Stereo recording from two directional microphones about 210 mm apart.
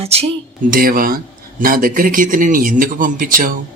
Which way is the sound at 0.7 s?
45° right (ahead or behind).